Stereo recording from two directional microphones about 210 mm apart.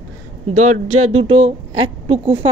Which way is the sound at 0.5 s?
90° right.